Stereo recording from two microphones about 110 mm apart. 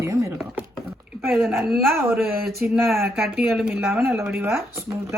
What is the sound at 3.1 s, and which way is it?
Speech, centre (ahead or behind).